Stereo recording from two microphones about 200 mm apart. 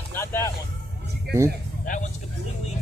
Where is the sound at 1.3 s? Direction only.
55° right (ahead or behind).